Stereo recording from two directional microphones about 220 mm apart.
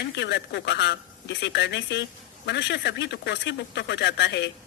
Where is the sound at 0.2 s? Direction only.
50° left (ahead or behind).